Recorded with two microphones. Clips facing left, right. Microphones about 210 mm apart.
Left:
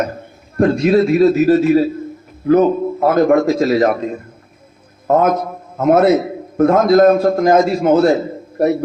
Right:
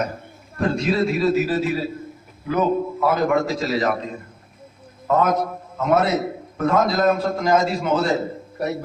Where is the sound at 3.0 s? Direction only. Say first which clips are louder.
Left 9 dB; 50° left (ahead or behind).